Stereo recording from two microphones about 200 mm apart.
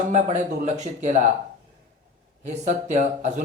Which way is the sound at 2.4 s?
35° right (ahead or behind).